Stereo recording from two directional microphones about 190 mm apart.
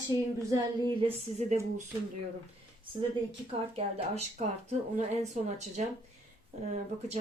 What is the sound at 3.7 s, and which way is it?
Speech, 35° right (ahead or behind).